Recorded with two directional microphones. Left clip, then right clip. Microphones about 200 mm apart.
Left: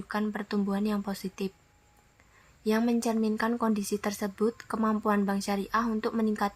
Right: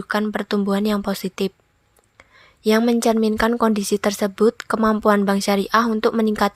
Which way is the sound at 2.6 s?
40° right (ahead or behind).